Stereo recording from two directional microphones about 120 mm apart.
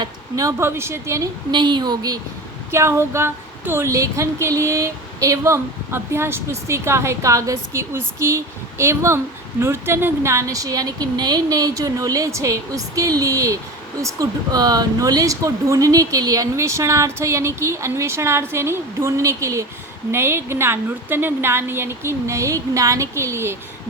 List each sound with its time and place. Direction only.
0.0 s speech: 30° right (ahead or behind)
1.5 s a woman's voice: 40° right (ahead or behind)
2.7 s speech: 20° right (ahead or behind)